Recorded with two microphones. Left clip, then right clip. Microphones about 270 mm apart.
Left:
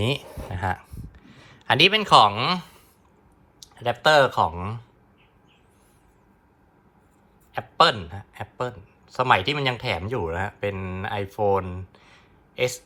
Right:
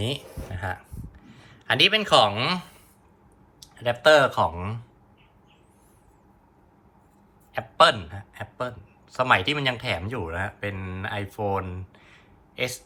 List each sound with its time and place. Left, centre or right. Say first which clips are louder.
0.0 s a sound: left 4 dB; left
4.0 s speech: even; centre
7.5 s a man's voice: right 1 dB; centre